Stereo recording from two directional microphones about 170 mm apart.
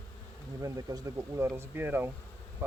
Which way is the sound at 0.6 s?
20° right (ahead or behind).